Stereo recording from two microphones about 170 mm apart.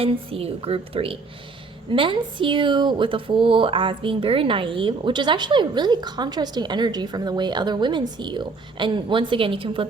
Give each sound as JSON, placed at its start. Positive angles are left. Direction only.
{"t": 0.0, "sound": "a woman's voice", "side_deg": -35}